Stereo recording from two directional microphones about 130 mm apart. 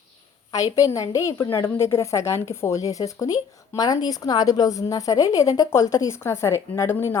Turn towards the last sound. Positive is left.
turn(degrees=20)  # may be behind; listen again after turning